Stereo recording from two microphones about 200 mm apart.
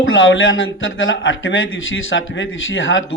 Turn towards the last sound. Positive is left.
turn(degrees=70)  # may be behind; listen again after turning